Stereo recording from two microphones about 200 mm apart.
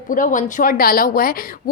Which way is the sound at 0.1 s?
40° left (ahead or behind).